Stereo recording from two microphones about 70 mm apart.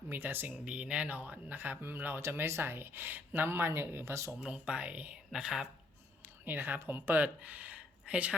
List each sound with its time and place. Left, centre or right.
0.1 s speech: right
0.6 s speech: centre; by 4.3 s right
4.4 s speech: centre
5.3 s speech: centre
6.2 s speech: right